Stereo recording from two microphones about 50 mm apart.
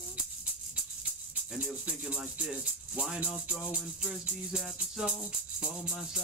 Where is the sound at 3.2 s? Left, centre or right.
Right.